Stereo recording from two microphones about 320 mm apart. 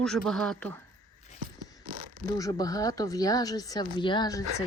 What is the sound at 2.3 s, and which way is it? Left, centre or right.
Speech, centre.